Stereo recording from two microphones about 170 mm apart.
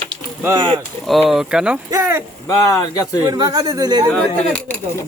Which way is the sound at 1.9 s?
15° right (ahead or behind).